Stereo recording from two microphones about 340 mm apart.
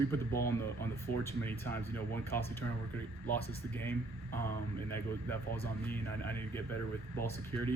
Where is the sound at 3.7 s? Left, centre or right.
Centre.